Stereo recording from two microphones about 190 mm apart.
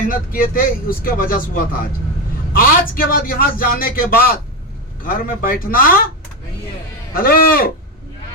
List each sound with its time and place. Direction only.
0.1 s speech: 50° left (ahead or behind)
7.1 s speech: 50° left (ahead or behind)